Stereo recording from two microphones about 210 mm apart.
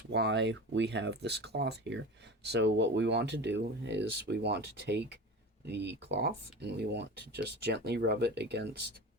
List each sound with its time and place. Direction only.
0.1 s speech: 55° right (ahead or behind)